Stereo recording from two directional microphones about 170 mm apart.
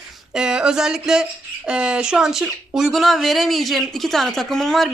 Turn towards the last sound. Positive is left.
turn(degrees=0)  # may be behind; listen again after turning